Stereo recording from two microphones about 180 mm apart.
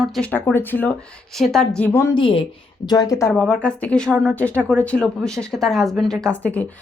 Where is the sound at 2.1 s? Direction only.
30° left (ahead or behind).